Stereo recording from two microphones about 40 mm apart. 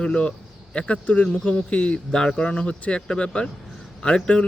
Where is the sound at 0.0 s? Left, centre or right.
Left.